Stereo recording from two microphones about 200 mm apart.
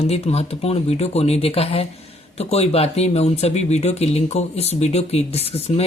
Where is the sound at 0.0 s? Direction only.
30° left (ahead or behind).